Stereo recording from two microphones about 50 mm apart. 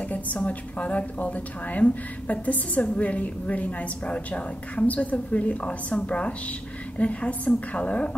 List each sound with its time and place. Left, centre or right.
0.1 s a woman's voice: left